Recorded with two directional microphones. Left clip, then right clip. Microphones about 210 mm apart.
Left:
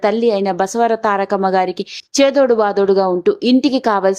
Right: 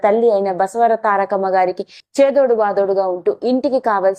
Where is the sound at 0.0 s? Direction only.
20° left (ahead or behind).